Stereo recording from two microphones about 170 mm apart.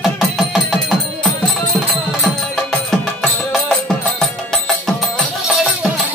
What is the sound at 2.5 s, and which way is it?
Music, centre (ahead or behind).